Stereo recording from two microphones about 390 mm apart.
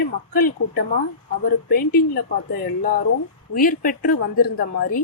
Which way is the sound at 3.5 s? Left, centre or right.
Left.